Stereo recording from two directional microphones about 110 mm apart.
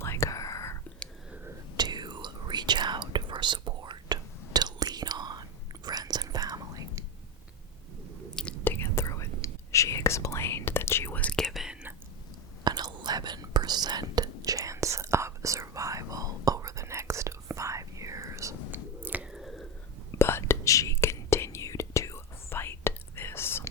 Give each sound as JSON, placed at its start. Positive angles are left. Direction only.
{"t": 0.0, "sound": "whispering", "side_deg": 25}
{"t": 1.7, "sound": "whispering", "side_deg": -40}
{"t": 8.4, "sound": "whispering", "side_deg": 10}
{"t": 8.7, "sound": "whispering", "side_deg": 25}
{"t": 12.6, "sound": "whispering", "side_deg": -40}
{"t": 19.0, "sound": "squish", "side_deg": -10}
{"t": 20.1, "sound": "whispering", "side_deg": 20}